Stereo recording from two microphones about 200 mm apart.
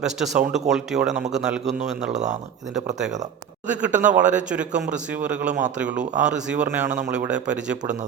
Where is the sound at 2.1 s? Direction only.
35° right (ahead or behind).